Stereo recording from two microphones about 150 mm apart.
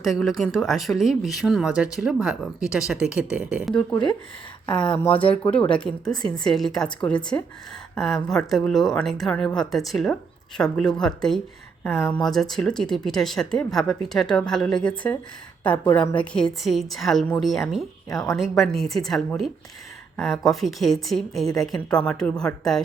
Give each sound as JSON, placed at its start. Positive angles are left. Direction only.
{"t": 0.0, "sound": "speech", "side_deg": 0}
{"t": 5.6, "sound": "speech", "side_deg": 5}
{"t": 11.8, "sound": "a woman's voice", "side_deg": 15}
{"t": 12.2, "sound": "a woman's voice", "side_deg": 0}
{"t": 18.1, "sound": "a woman's voice", "side_deg": 25}
{"t": 18.3, "sound": "speech", "side_deg": 0}